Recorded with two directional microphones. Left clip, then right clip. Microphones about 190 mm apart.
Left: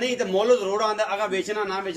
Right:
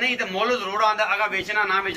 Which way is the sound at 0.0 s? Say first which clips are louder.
Even; 35° left (ahead or behind).